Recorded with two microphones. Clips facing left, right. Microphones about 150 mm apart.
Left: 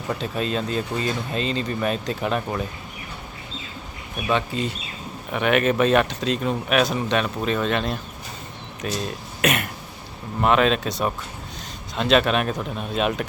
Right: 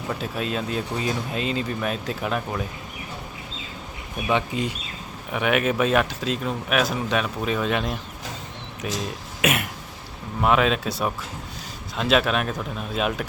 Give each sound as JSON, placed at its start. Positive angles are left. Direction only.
{"t": 0.2, "sound": "speech", "side_deg": -5}
{"t": 4.3, "sound": "speech", "side_deg": -15}